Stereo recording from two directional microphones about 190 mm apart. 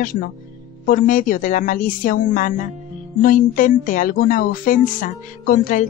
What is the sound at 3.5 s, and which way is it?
Speech, 45° left (ahead or behind).